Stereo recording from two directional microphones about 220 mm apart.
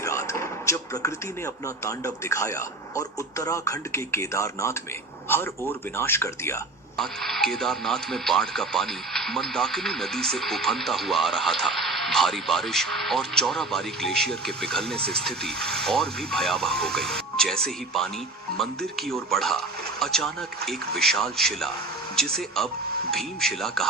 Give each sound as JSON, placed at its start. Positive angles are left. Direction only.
{"t": 0.0, "sound": "a sound", "side_deg": 15}
{"t": 1.6, "sound": "a man's voice", "side_deg": 15}
{"t": 6.9, "sound": "speech", "side_deg": 0}
{"t": 14.9, "sound": "speech", "side_deg": -45}
{"t": 15.2, "sound": "speech", "side_deg": 0}